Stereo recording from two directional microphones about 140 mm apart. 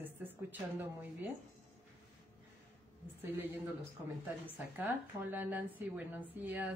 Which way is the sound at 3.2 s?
15° right (ahead or behind).